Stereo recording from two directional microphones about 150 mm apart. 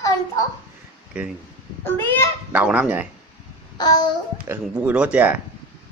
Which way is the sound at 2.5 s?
10° right (ahead or behind).